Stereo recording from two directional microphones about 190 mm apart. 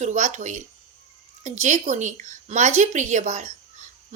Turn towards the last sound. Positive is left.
turn(degrees=-40)  # may be behind; listen again after turning